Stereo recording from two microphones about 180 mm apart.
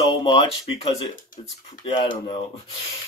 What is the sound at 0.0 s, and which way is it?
Speech, 25° left (ahead or behind).